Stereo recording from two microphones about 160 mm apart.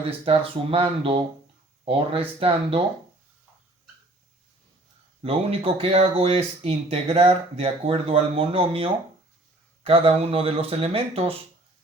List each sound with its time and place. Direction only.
0.0 s speech: 40° right (ahead or behind)
5.2 s speech: 35° right (ahead or behind)